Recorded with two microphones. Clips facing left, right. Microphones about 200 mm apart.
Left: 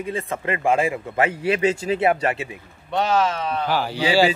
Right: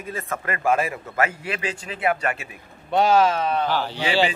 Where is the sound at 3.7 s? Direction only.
10° left (ahead or behind).